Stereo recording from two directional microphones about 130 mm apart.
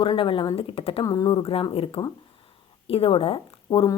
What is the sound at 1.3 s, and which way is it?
A woman's voice, 45° left (ahead or behind).